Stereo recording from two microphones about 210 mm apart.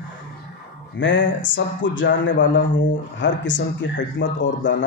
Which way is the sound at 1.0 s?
60° left (ahead or behind).